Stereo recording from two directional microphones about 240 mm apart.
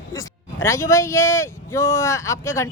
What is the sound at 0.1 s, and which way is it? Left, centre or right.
Speech, centre.